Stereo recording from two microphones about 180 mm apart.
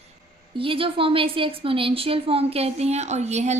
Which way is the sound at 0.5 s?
30° right (ahead or behind).